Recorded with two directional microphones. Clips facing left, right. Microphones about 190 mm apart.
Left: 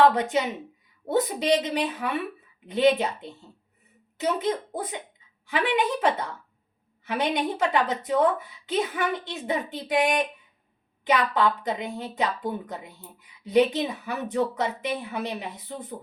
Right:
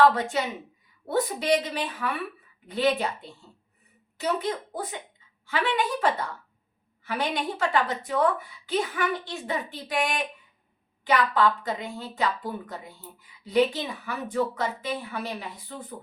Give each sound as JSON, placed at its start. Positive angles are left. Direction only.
{"t": 0.1, "sound": "speech", "side_deg": 20}